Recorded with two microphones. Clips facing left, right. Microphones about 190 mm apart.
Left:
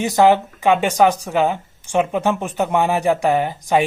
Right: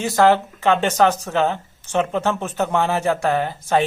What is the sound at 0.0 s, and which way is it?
Speech, 15° left (ahead or behind).